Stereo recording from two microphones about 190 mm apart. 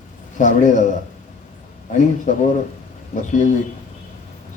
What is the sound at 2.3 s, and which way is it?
A man's voice, 40° left (ahead or behind).